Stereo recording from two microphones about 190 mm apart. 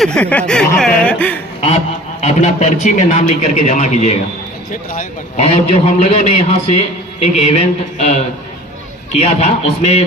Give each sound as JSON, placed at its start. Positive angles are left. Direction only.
{"t": 0.0, "sound": "speech", "side_deg": 5}
{"t": 2.2, "sound": "a man's voice", "side_deg": 40}
{"t": 5.5, "sound": "a man's voice", "side_deg": 35}